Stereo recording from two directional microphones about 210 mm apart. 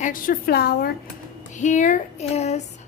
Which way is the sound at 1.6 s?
35° left (ahead or behind).